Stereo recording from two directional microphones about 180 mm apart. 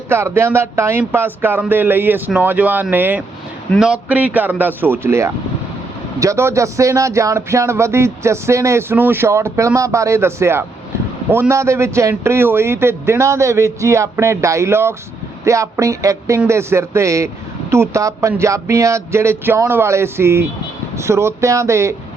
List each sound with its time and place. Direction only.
0.1 s speech: 15° right (ahead or behind)